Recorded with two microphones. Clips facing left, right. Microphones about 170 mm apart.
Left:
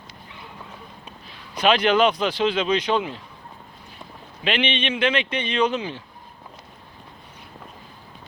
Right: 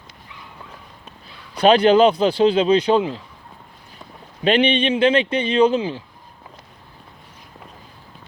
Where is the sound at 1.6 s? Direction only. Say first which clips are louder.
Right 6 dB; 35° right (ahead or behind).